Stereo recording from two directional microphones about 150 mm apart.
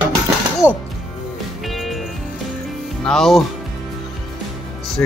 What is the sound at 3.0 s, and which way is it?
Speech, 5° left (ahead or behind).